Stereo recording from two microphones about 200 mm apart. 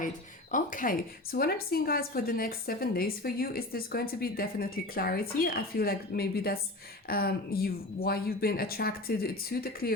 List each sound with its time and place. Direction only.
0.5 s a woman's voice: 40° left (ahead or behind)